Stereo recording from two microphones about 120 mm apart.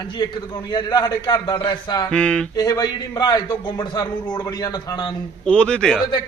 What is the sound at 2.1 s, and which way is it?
Speech, 5° left (ahead or behind).